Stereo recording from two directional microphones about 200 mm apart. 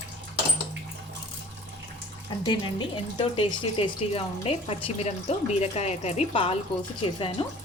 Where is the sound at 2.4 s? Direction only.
25° left (ahead or behind).